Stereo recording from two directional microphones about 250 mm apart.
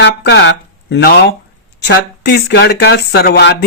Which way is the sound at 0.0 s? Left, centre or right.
Left.